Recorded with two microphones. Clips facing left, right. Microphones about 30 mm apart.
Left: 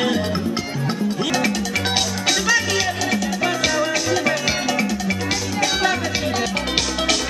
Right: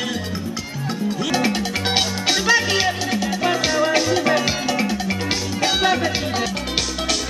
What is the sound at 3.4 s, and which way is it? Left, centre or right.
Music, centre.